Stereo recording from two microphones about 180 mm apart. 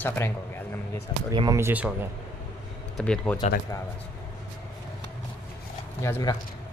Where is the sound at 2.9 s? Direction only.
5° left (ahead or behind).